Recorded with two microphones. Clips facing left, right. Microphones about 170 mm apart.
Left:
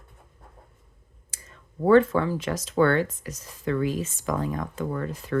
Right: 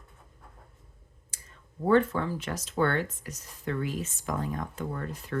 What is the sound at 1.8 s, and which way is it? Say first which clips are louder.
Speech: left 6 dB; 90° left.